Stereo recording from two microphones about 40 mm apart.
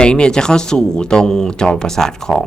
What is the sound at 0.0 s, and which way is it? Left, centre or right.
Speech, left.